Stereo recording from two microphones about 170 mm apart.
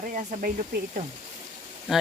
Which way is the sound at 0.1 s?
50° right (ahead or behind).